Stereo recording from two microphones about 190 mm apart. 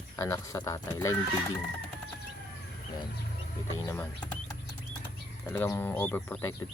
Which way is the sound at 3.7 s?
15° left (ahead or behind).